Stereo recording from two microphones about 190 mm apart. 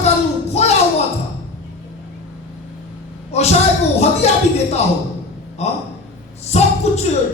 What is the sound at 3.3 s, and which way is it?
Speech, 35° left (ahead or behind).